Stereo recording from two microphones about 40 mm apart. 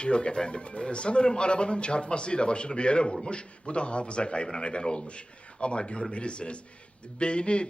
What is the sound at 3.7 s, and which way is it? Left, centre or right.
A man's voice, left.